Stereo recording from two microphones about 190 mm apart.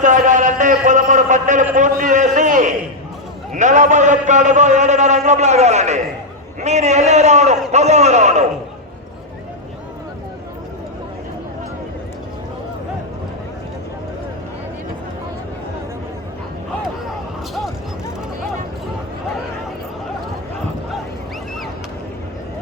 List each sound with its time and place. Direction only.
0.0 s a man's voice: 40° right (ahead or behind)